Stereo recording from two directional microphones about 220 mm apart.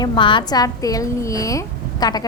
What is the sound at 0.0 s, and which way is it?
A woman's voice, 20° left (ahead or behind).